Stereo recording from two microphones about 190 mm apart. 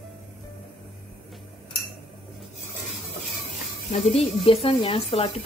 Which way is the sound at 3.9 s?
35° left (ahead or behind).